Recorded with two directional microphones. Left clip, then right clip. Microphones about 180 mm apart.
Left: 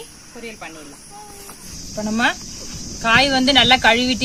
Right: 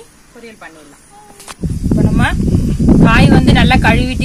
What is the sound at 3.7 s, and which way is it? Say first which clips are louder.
Speech: right 2 dB; 15° right (ahead or behind).